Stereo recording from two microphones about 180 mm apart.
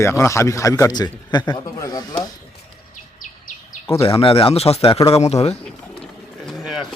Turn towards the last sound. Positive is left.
turn(degrees=0)  # may be behind; listen again after turning